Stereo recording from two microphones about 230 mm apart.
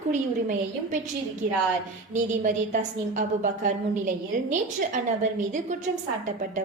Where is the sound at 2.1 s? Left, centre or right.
Right.